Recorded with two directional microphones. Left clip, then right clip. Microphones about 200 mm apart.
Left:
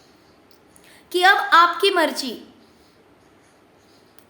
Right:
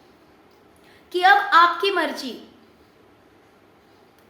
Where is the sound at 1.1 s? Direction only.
60° left (ahead or behind).